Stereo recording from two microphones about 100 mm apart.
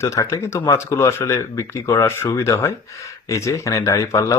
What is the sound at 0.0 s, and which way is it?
Speech, 30° left (ahead or behind).